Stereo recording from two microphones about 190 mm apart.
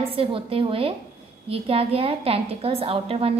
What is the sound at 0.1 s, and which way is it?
A woman's voice, 30° right (ahead or behind).